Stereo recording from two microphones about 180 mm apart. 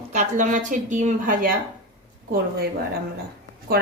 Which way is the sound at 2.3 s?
55° right (ahead or behind).